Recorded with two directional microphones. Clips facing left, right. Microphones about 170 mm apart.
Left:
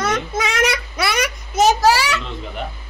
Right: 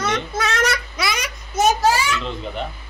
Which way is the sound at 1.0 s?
60° left (ahead or behind).